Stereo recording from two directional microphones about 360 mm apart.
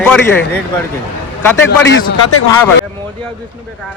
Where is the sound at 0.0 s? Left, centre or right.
Centre.